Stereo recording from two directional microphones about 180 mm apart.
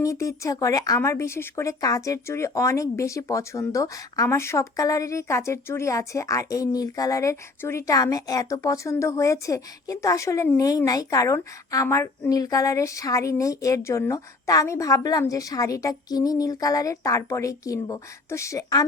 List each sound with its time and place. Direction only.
0.0 s speech: 15° left (ahead or behind)